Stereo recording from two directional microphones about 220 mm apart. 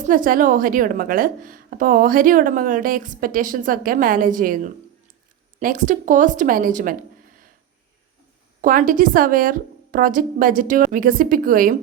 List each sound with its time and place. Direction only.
0.0 s a woman's voice: 40° right (ahead or behind)
8.6 s a woman's voice: 40° right (ahead or behind)